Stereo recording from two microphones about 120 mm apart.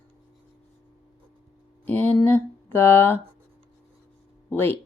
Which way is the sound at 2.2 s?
20° left (ahead or behind).